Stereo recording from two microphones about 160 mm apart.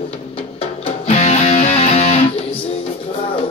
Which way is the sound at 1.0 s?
45° left (ahead or behind).